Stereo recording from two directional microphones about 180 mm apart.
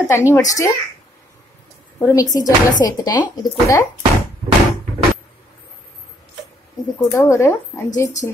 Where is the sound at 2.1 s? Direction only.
20° left (ahead or behind).